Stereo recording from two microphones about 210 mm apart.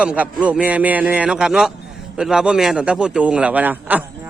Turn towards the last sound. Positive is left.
turn(degrees=-10)  # may be behind; listen again after turning